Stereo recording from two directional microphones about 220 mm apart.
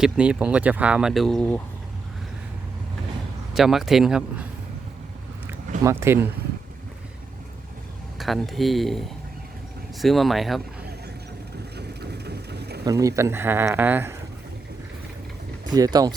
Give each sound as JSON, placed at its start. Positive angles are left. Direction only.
{"t": 0.0, "sound": "speech", "side_deg": -5}
{"t": 3.5, "sound": "speech", "side_deg": 0}
{"t": 5.5, "sound": "a sound", "side_deg": -10}
{"t": 8.2, "sound": "speech", "side_deg": 0}
{"t": 11.8, "sound": "vehicle", "side_deg": -50}
{"t": 12.8, "sound": "speech", "side_deg": -15}
{"t": 15.7, "sound": "speech", "side_deg": -15}